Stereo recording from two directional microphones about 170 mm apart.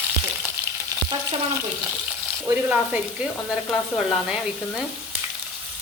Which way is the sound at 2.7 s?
5° right (ahead or behind).